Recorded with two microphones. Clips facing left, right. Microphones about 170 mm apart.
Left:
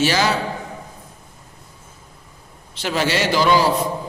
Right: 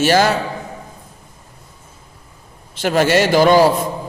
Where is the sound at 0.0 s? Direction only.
50° right (ahead or behind).